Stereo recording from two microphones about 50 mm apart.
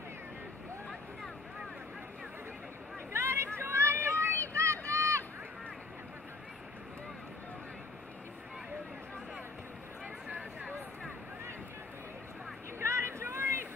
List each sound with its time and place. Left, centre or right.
3.1 s vehicle: right
3.5 s run: right
12.7 s boat: right